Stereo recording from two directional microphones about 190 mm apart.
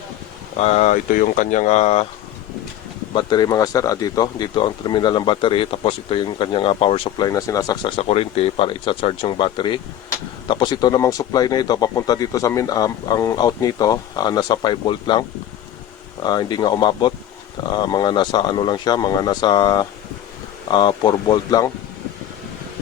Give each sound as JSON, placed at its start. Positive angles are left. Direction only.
{"t": 0.6, "sound": "speech", "side_deg": 35}
{"t": 3.2, "sound": "speech", "side_deg": 20}
{"t": 16.2, "sound": "speech", "side_deg": 20}